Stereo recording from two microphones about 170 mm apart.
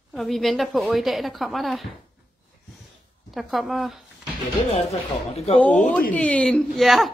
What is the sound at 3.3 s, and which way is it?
Speech, centre (ahead or behind).